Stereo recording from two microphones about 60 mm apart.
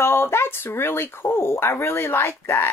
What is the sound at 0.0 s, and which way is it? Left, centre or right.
Speech, left.